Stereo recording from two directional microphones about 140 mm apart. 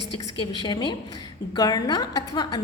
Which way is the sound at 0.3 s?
35° left (ahead or behind).